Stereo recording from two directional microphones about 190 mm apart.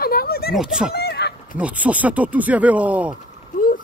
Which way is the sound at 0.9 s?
60° left (ahead or behind).